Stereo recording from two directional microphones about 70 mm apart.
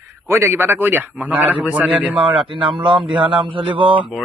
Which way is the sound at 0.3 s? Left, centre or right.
Right.